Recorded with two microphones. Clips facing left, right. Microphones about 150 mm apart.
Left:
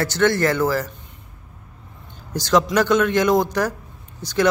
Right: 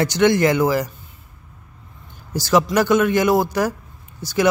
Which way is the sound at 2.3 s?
10° right (ahead or behind).